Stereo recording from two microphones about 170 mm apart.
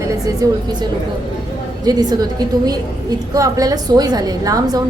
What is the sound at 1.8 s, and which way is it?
Speech, 25° right (ahead or behind).